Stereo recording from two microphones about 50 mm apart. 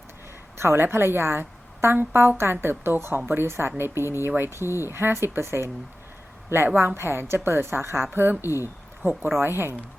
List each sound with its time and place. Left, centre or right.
0.6 s a woman's voice: right
6.7 s a woman's voice: right